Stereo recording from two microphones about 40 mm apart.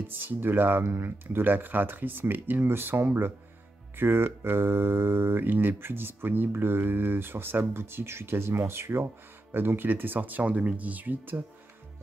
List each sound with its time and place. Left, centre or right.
0.0 s speech: right
0.8 s speech: right
5.4 s speech: right
6.5 s speech: right